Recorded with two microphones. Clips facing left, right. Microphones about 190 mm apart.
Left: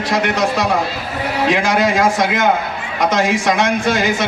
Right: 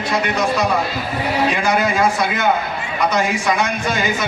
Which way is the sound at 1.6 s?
90° left.